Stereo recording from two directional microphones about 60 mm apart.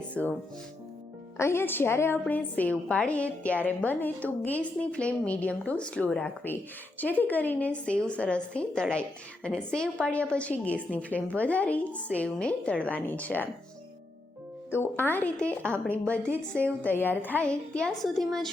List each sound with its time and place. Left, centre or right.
0.1 s speech: left
1.4 s a woman's voice: left
2.2 s a woman's voice: left
2.9 s a woman's voice: centre
6.5 s a woman's voice: left
14.7 s a woman's voice: left
15.4 s a woman's voice: centre
16.8 s a woman's voice: left
17.4 s a woman's voice: centre
18.0 s a woman's voice: centre